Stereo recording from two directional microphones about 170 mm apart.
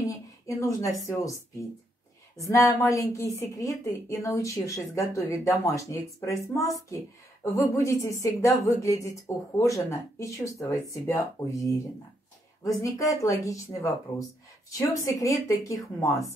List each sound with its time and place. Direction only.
0.0 s a woman's voice: 20° left (ahead or behind)